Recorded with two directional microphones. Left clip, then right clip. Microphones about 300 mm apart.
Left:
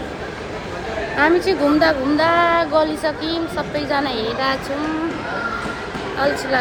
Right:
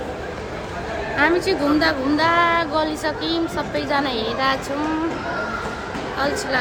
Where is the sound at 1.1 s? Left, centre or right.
Centre.